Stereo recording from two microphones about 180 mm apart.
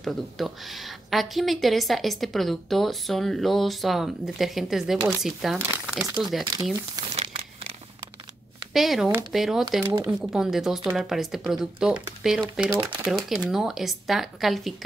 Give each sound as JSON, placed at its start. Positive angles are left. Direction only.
{"t": 0.0, "sound": "a woman's voice", "side_deg": 0}
{"t": 6.5, "sound": "speech", "side_deg": -20}
{"t": 7.2, "sound": "crumpling", "side_deg": -35}
{"t": 8.7, "sound": "a woman's voice", "side_deg": 0}